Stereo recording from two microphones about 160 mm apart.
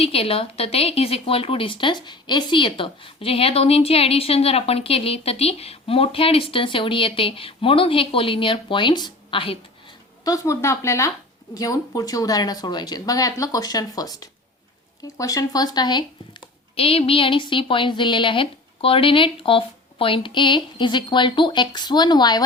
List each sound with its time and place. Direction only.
0.0 s a woman's voice: 35° left (ahead or behind)
10.2 s a woman's voice: 20° left (ahead or behind)